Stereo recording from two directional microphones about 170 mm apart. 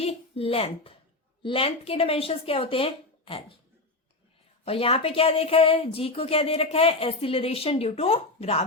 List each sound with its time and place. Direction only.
0.0 s a child's voice: 35° left (ahead or behind)
4.6 s speech: 35° left (ahead or behind)